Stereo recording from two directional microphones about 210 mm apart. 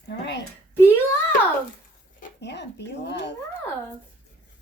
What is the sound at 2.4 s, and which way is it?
Speech, 55° left (ahead or behind).